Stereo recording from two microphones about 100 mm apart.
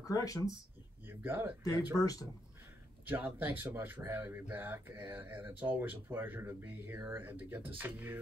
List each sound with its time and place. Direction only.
0.0 s speech: 35° left (ahead or behind)
1.0 s speech: 20° right (ahead or behind)
2.0 s speech: 35° left (ahead or behind)
3.1 s speech: 20° right (ahead or behind)